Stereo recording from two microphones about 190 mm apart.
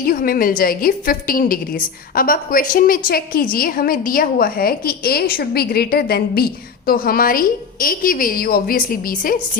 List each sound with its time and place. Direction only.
0.0 s a woman's voice: 50° left (ahead or behind)